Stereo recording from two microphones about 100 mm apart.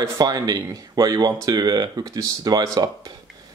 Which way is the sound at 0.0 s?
40° right (ahead or behind).